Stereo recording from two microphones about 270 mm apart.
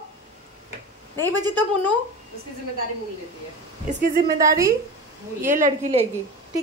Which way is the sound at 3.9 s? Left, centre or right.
Right.